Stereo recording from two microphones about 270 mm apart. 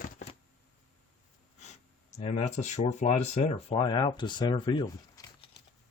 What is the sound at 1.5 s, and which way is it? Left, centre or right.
Speech, left.